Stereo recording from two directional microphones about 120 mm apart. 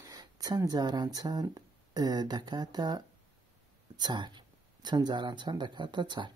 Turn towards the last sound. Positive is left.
turn(degrees=-40)  # may be behind; listen again after turning